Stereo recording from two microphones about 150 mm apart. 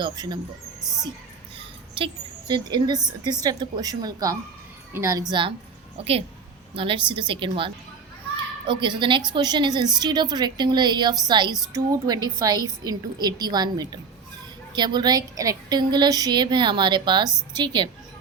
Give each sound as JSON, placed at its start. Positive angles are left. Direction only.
{"t": 0.0, "sound": "a woman's voice", "side_deg": -30}
{"t": 0.8, "sound": "speech", "side_deg": 0}
{"t": 2.5, "sound": "a woman's voice", "side_deg": -30}
{"t": 5.3, "sound": "a woman's voice", "side_deg": -35}